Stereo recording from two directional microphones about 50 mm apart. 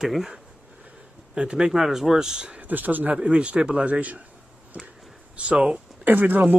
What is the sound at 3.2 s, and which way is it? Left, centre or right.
Speech, right.